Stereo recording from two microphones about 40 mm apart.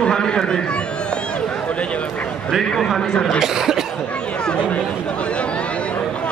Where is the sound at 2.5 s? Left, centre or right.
Centre.